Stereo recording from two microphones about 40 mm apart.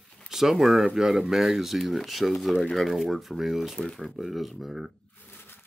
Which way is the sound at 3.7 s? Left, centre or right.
Centre.